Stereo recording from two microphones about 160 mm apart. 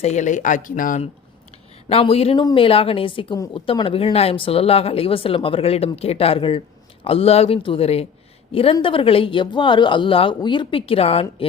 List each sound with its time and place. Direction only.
0.0 s speech: 45° left (ahead or behind)
1.9 s speech: 35° left (ahead or behind)
3.3 s a woman's voice: 20° left (ahead or behind)
3.7 s speech: 35° left (ahead or behind)